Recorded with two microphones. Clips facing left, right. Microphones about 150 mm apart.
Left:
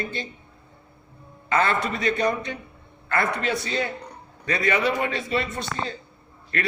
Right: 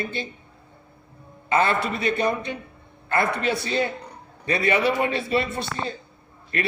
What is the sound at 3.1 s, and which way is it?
A man's voice, 25° right (ahead or behind).